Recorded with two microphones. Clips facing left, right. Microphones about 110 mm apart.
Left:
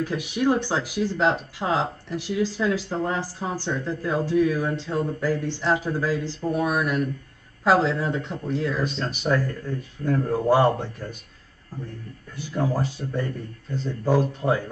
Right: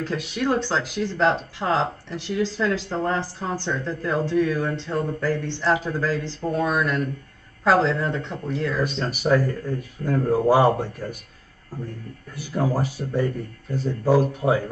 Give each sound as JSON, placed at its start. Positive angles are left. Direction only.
{"t": 0.0, "sound": "speech", "side_deg": 15}
{"t": 9.0, "sound": "speech", "side_deg": -10}
{"t": 10.0, "sound": "speech", "side_deg": -55}
{"t": 10.3, "sound": "speech", "side_deg": -10}
{"t": 12.4, "sound": "speech", "side_deg": -10}